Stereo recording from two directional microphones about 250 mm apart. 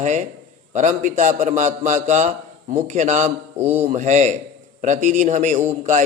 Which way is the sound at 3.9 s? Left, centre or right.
Right.